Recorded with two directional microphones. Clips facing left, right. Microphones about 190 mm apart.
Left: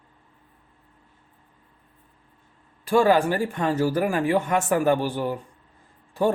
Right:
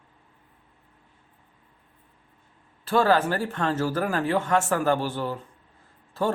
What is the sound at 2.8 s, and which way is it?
Speech, 10° left (ahead or behind).